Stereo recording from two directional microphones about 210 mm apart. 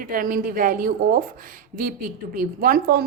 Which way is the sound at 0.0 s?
40° right (ahead or behind).